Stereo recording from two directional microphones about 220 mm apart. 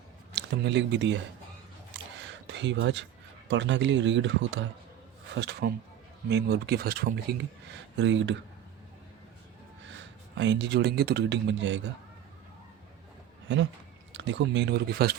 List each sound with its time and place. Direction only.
0.3 s speech: 55° right (ahead or behind)
2.1 s a sound: 55° right (ahead or behind)
3.5 s speech: 55° right (ahead or behind)
7.9 s speech: 55° right (ahead or behind)
10.0 s speech: 55° right (ahead or behind)
14.1 s speech: 55° right (ahead or behind)